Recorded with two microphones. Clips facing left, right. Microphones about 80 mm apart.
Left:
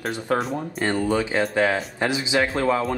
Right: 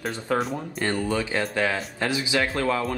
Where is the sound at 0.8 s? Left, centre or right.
Left.